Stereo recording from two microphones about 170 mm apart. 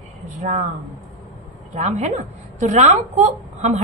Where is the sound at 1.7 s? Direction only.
40° right (ahead or behind).